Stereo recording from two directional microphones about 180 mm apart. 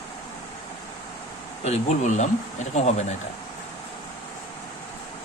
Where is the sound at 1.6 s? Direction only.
40° left (ahead or behind).